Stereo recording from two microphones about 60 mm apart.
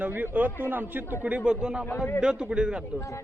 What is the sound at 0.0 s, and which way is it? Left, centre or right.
Speech, right.